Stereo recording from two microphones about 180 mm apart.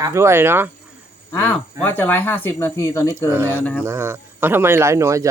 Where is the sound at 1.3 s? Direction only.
10° left (ahead or behind).